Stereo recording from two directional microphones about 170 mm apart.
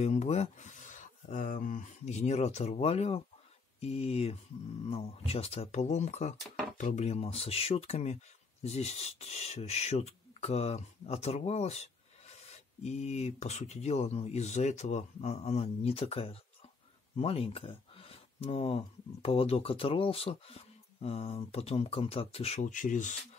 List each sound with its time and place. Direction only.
0.0 s speech: 40° left (ahead or behind)